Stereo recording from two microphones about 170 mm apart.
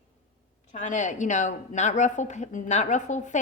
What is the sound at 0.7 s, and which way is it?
A woman's voice, 45° left (ahead or behind).